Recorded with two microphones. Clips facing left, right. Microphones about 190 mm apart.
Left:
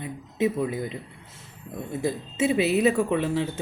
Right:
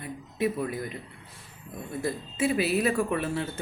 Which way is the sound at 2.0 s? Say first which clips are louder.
Left 3 dB; 25° left (ahead or behind).